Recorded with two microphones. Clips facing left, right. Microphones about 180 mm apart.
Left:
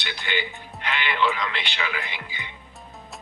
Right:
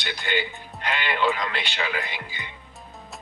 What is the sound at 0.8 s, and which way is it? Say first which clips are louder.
Speech: even; 45° right (ahead or behind).